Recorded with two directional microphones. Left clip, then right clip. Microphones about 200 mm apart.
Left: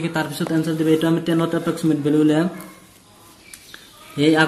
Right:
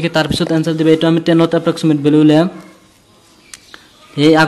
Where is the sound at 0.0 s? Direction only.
40° right (ahead or behind).